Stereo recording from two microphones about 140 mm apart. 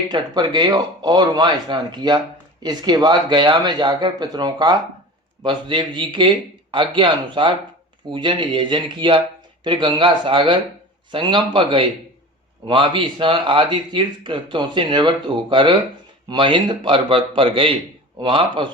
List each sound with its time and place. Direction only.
0.1 s speech: 30° right (ahead or behind)